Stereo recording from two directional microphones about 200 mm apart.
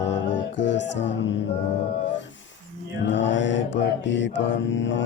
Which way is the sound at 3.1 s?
65° left (ahead or behind).